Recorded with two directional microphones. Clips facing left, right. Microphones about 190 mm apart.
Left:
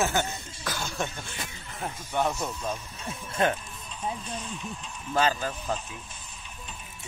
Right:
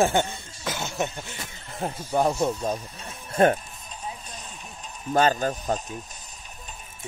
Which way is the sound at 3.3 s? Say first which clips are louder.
Right 7 dB; 40° right (ahead or behind).